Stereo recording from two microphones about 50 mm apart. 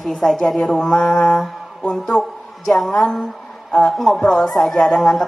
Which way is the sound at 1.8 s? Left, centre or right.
Centre.